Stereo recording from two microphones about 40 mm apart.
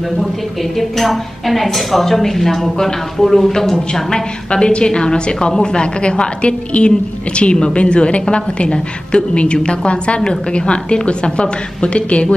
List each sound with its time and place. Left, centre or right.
0.2 s a woman's voice: centre
3.7 s a woman's voice: left